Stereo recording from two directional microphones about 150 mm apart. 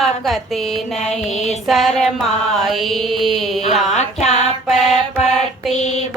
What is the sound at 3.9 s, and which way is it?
Mantra, 50° left (ahead or behind).